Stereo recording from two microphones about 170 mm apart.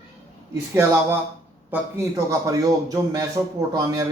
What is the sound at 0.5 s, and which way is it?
A man's voice, 15° right (ahead or behind).